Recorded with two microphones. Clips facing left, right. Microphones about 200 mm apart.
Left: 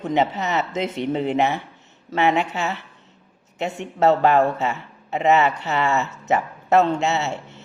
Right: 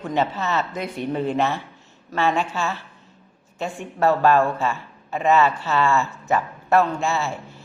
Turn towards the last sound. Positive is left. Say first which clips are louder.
# left 1 dB
turn(degrees=20)  # may be behind; listen again after turning